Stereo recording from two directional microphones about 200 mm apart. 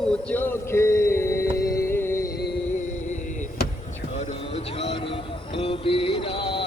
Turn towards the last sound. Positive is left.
turn(degrees=25)  # may be behind; listen again after turning